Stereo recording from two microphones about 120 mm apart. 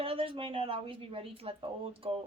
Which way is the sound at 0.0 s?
50° right (ahead or behind).